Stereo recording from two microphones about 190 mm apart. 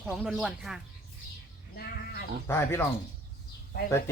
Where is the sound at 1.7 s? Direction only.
55° left (ahead or behind).